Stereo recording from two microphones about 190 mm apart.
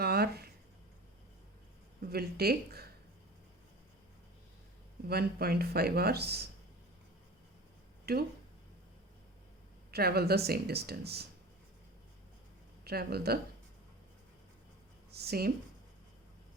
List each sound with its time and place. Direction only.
0.0 s a sound: 55° right (ahead or behind)
2.0 s speech: 55° right (ahead or behind)
5.0 s speech: 55° right (ahead or behind)
8.1 s speech: 55° right (ahead or behind)
9.9 s speech: 55° right (ahead or behind)
12.8 s speech: 55° right (ahead or behind)
15.1 s speech: 55° right (ahead or behind)